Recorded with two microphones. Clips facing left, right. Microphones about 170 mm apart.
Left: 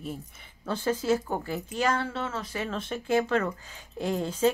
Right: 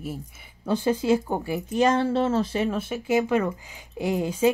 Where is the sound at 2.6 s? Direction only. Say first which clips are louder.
Right 4 dB; 10° right (ahead or behind).